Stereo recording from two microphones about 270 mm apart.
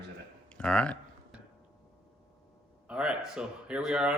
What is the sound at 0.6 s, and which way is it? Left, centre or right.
Speech, centre.